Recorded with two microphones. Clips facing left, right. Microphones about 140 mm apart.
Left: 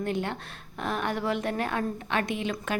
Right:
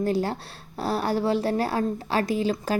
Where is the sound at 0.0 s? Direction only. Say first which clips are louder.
Right 5 dB; 35° right (ahead or behind).